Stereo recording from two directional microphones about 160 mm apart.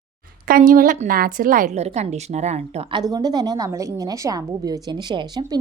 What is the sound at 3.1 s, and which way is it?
A woman's voice, 25° right (ahead or behind).